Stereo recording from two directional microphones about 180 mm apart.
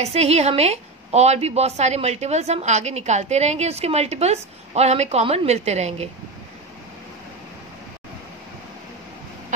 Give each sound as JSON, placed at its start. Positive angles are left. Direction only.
{"t": 0.0, "sound": "a woman's voice", "side_deg": -35}